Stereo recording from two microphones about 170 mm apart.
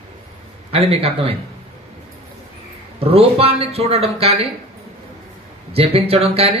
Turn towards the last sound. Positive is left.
turn(degrees=-35)  # may be behind; listen again after turning